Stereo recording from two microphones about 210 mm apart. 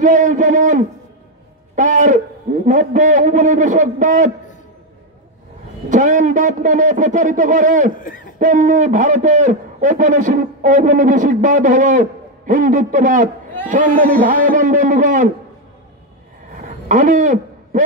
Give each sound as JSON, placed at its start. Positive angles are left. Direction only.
{"t": 0.0, "sound": "a man's voice", "side_deg": -40}
{"t": 5.9, "sound": "a man's voice", "side_deg": -35}
{"t": 8.0, "sound": "hoot", "side_deg": 40}
{"t": 8.4, "sound": "a man's voice", "side_deg": -40}
{"t": 16.5, "sound": "a sound", "side_deg": -40}